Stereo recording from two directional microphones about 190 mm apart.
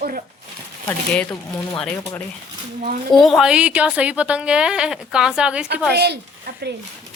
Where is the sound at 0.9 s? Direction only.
10° left (ahead or behind).